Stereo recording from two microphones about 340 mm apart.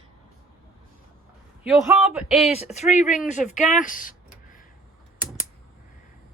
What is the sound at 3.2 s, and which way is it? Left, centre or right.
Speech, left.